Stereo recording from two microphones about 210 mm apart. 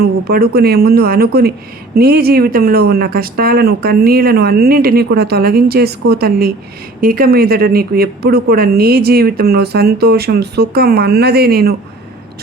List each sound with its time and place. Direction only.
0.0 s a woman's voice: 45° right (ahead or behind)